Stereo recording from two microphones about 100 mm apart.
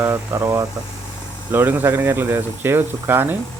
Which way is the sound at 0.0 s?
25° right (ahead or behind).